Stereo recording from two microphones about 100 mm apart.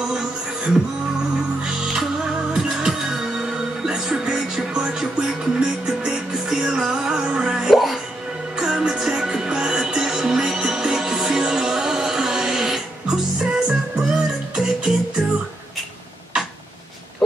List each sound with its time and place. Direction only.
1.6 s music: 5° right (ahead or behind)